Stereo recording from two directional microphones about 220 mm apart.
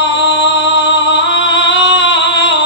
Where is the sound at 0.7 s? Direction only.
55° left (ahead or behind).